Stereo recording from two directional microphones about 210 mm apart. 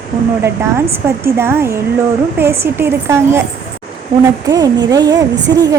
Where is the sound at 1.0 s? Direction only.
10° right (ahead or behind).